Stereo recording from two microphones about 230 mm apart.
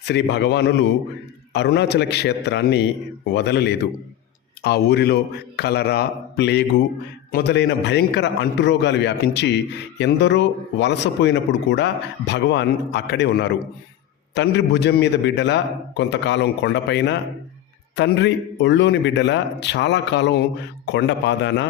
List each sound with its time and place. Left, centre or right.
0.0 s speech: left